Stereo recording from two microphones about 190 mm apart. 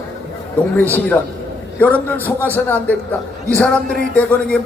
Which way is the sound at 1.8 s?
10° left (ahead or behind).